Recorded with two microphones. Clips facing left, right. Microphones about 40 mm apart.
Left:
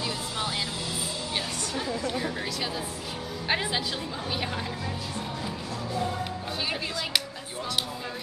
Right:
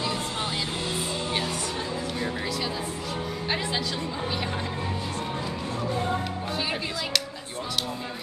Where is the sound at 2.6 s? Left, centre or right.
Centre.